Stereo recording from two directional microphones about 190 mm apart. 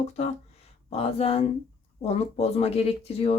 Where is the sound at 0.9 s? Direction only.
30° left (ahead or behind).